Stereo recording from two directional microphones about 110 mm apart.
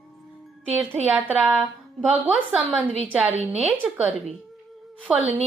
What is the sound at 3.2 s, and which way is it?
Speech, 70° right (ahead or behind).